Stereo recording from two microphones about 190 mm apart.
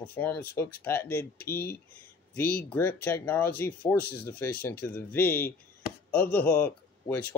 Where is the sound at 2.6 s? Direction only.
10° left (ahead or behind).